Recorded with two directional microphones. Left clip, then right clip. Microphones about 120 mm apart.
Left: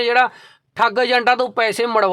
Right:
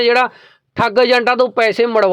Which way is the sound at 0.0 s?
30° right (ahead or behind).